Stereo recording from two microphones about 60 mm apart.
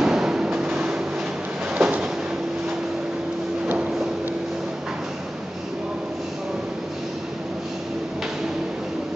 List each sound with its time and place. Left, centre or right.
0.0 s vehicle: centre
1.7 s train: centre